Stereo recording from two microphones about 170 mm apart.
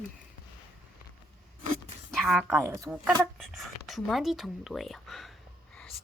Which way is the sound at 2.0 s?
Centre (ahead or behind).